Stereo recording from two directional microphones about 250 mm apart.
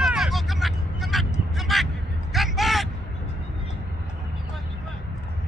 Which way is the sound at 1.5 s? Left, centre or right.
Centre.